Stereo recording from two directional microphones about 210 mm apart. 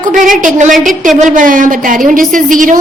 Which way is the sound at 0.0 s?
40° right (ahead or behind).